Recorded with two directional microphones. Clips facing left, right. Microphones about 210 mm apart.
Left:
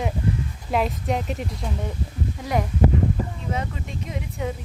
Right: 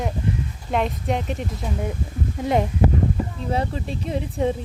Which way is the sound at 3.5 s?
35° right (ahead or behind).